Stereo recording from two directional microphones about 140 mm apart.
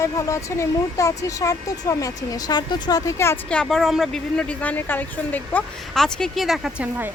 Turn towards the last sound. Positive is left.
turn(degrees=0)  # may be behind; listen again after turning